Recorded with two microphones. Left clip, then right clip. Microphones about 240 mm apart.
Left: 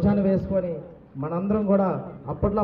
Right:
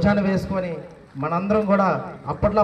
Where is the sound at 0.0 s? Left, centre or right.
Right.